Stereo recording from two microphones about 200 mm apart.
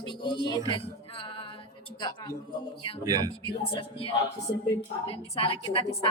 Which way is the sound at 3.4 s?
25° left (ahead or behind).